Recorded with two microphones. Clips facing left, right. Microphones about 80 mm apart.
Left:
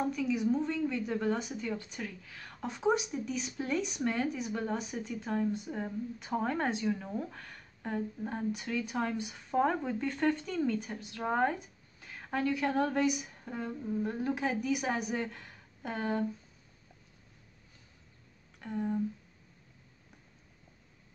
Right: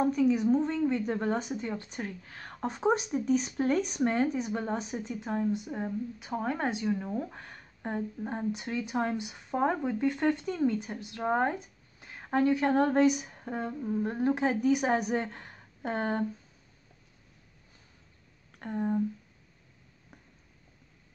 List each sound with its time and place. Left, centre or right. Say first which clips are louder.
0.1 s a woman's voice: right 5 dB; right; by 5.9 s centre
5.9 s speech: right 2 dB; centre
7.3 s a sound: right 2 dB; right
8.2 s speech: right 2 dB; right
12.0 s a sound: right 1 dB; centre
12.3 s a woman's voice: right 6 dB; right
18.6 s a woman's voice: right 3 dB; right